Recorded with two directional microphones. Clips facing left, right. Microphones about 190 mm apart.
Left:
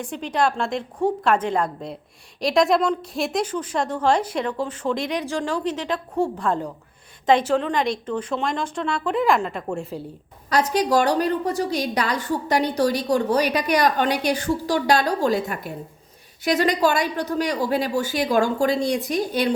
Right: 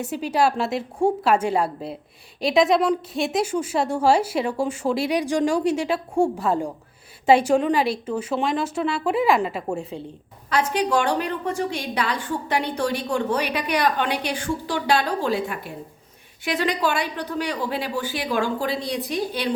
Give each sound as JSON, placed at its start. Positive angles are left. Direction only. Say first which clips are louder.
{"t": 0.0, "sound": "a woman's voice", "louder": "right 2 dB", "side_deg": -5}
{"t": 10.5, "sound": "a woman's voice", "louder": "left 2 dB", "side_deg": 40}